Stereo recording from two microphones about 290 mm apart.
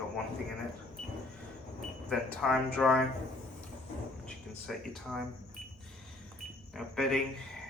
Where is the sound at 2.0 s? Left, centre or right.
Centre.